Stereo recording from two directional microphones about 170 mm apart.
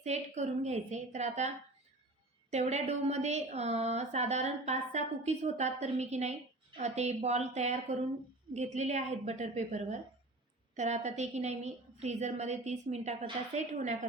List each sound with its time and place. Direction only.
0.0 s a woman's voice: 40° right (ahead or behind)
2.5 s a woman's voice: 40° right (ahead or behind)